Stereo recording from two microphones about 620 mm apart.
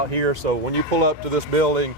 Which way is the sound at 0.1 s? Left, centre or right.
Right.